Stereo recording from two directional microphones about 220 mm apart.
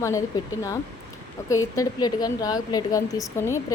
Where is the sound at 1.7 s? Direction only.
15° left (ahead or behind).